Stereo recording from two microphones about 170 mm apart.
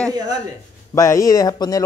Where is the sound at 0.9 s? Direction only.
20° left (ahead or behind).